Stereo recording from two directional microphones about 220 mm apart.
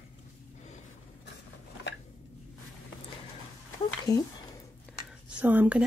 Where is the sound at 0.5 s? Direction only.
30° left (ahead or behind).